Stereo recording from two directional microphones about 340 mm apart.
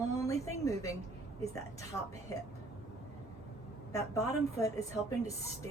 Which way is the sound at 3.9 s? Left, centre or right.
Centre.